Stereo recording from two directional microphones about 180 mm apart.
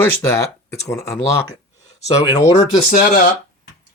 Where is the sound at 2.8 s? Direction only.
55° left (ahead or behind).